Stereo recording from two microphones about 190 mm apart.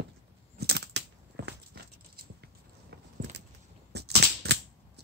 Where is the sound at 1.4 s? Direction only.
75° right (ahead or behind).